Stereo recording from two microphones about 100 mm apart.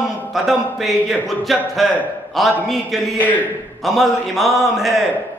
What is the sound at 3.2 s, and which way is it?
Speech, 15° left (ahead or behind).